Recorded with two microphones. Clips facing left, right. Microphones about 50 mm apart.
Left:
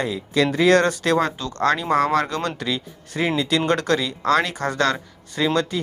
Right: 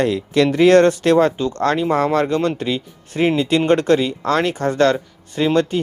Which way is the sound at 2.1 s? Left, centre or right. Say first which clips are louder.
Right 4 dB; right.